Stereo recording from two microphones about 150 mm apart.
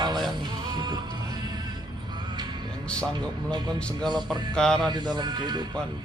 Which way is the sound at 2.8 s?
5° left (ahead or behind).